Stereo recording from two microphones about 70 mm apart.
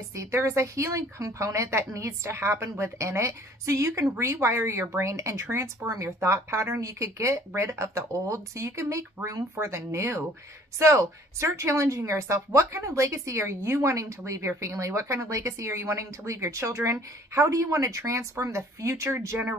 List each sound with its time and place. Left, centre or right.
0.1 s speech: right
5.9 s speech: right